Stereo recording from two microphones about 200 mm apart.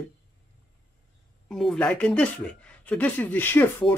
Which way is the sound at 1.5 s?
Centre (ahead or behind).